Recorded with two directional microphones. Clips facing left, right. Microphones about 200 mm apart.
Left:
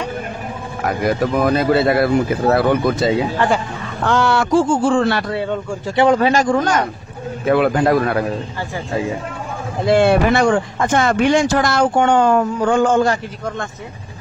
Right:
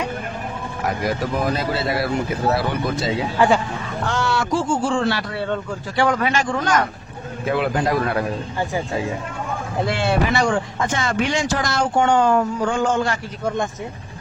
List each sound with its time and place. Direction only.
1.4 s speech: 55° left (ahead or behind)
3.3 s speech: centre (ahead or behind)
4.0 s speech: 60° left (ahead or behind)
5.3 s speech: 10° left (ahead or behind)
5.9 s speech: 25° left (ahead or behind)
7.4 s speech: 60° left (ahead or behind)
9.9 s speech: 55° left (ahead or behind)